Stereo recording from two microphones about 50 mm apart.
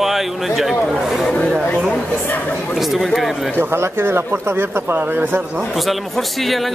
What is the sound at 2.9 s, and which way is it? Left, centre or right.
Speech, centre.